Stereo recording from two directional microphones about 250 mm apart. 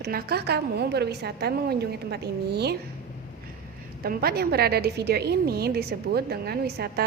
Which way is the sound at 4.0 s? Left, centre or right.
Right.